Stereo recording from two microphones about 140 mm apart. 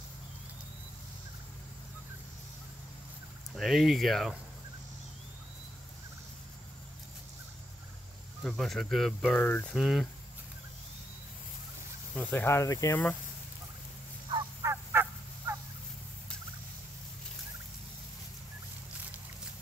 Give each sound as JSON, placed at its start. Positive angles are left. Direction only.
{"t": 3.5, "sound": "speech", "side_deg": 0}
{"t": 8.4, "sound": "speech", "side_deg": 0}
{"t": 9.8, "sound": "speech", "side_deg": -5}
{"t": 12.2, "sound": "speech", "side_deg": 15}
{"t": 14.6, "sound": "fowl", "side_deg": -20}